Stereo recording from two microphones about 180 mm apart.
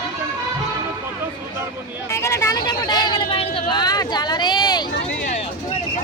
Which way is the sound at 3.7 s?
25° left (ahead or behind).